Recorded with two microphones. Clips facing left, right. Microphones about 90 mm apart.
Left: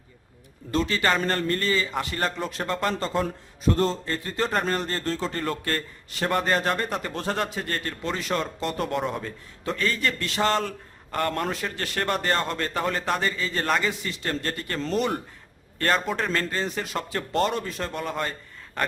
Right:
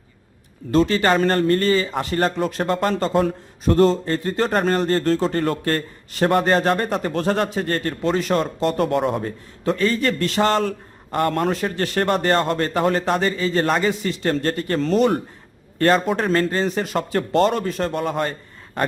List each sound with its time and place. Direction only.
0.7 s a man's voice: 45° right (ahead or behind)
2.3 s speech: 55° right (ahead or behind)
2.6 s a man's voice: 45° right (ahead or behind)
9.6 s a man's voice: 30° right (ahead or behind); by 10.8 s 50° right (ahead or behind)
11.3 s a man's voice: 35° right (ahead or behind)
12.9 s a man's voice: 30° right (ahead or behind)
14.0 s a man's voice: 40° right (ahead or behind)